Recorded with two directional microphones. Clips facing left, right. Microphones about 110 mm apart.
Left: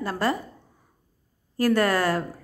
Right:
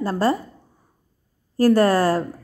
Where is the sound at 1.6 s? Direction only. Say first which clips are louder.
Right 5 dB; 35° right (ahead or behind).